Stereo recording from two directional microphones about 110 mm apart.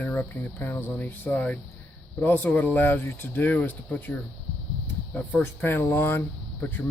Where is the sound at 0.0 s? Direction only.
20° left (ahead or behind).